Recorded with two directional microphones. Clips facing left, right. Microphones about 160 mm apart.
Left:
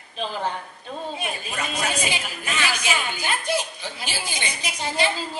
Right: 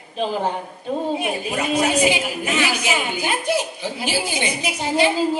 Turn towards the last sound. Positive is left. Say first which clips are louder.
# right 6 dB
turn(degrees=-10)  # may be behind; listen again after turning